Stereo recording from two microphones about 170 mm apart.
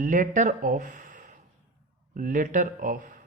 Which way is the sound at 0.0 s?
50° right (ahead or behind).